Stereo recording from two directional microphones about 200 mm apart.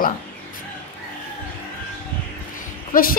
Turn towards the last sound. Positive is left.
turn(degrees=45)  # may be behind; listen again after turning